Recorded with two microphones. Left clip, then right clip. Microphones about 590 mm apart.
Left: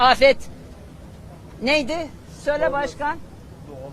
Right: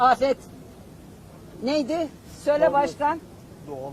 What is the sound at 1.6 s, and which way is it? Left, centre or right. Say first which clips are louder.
Speech: left 4 dB; left.